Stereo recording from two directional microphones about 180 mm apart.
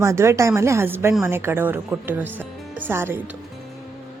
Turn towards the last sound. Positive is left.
turn(degrees=-10)  # may be behind; listen again after turning